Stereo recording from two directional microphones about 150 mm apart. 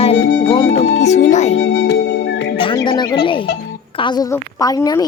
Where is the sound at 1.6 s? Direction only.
90° left.